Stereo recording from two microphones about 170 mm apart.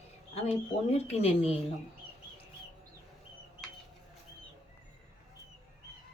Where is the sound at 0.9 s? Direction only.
35° left (ahead or behind).